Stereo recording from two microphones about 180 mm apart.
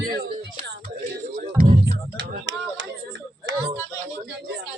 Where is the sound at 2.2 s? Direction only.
90° right.